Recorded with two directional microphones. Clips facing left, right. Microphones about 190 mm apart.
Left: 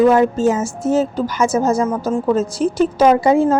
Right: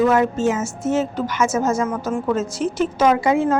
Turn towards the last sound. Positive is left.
turn(degrees=35)  # may be behind; listen again after turning